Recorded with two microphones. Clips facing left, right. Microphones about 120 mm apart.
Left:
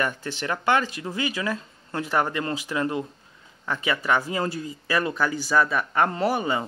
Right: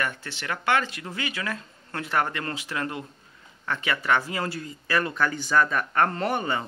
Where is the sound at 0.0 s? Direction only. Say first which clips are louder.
Left 4 dB; 15° left (ahead or behind).